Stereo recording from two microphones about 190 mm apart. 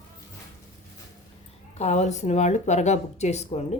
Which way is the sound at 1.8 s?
35° left (ahead or behind).